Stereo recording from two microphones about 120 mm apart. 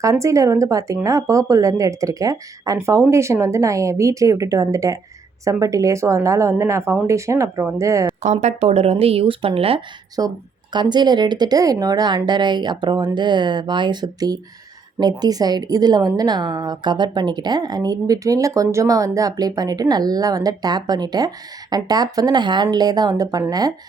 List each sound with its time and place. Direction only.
0.0 s speech: 25° right (ahead or behind)
8.2 s speech: 70° right (ahead or behind); by 9.8 s 50° right (ahead or behind)
10.2 s a woman's voice: 35° right (ahead or behind)